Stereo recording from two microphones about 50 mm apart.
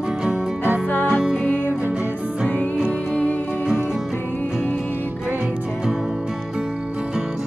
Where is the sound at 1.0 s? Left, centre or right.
Centre.